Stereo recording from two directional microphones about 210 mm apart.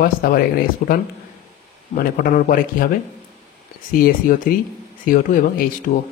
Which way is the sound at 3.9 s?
40° left (ahead or behind).